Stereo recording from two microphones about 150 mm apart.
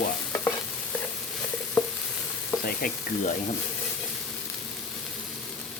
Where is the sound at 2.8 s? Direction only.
70° left (ahead or behind).